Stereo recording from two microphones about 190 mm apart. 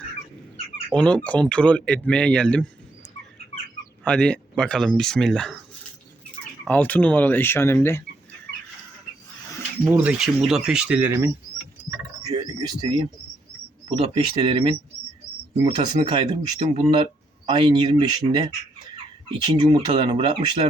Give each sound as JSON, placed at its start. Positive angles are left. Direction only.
{"t": 0.9, "sound": "speech", "side_deg": 5}
{"t": 4.0, "sound": "speech", "side_deg": 5}
{"t": 6.7, "sound": "speech", "side_deg": 10}
{"t": 9.8, "sound": "speech", "side_deg": -15}
{"t": 10.1, "sound": "speech", "side_deg": -5}
{"t": 12.3, "sound": "speech", "side_deg": -25}